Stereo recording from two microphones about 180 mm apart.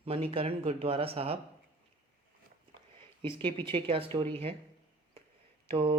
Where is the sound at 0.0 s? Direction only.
30° right (ahead or behind).